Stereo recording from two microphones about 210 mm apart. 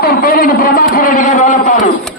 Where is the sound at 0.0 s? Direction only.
45° left (ahead or behind).